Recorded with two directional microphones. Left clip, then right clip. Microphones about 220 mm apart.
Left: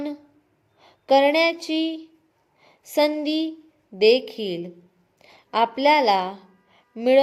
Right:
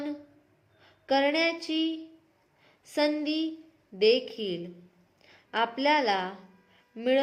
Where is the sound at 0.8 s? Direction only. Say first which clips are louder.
Left 9 dB; 30° left (ahead or behind).